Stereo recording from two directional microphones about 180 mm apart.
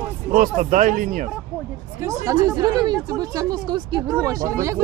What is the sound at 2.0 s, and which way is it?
A woman's voice, 15° right (ahead or behind).